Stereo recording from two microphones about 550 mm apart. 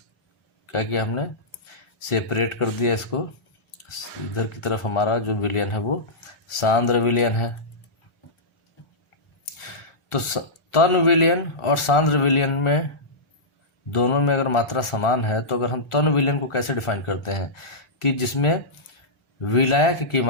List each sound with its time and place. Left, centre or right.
0.7 s a man's voice: left
4.6 s a man's voice: left
10.1 s a man's voice: left
13.9 s a man's voice: left